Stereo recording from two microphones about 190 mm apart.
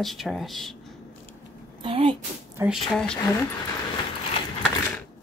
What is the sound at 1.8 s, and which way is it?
Speech, 25° right (ahead or behind).